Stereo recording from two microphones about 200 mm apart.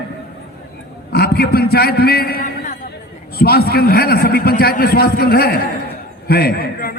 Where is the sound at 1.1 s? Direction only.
50° left (ahead or behind).